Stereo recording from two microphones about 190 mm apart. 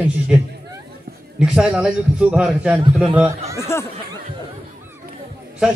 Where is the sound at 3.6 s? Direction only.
15° left (ahead or behind).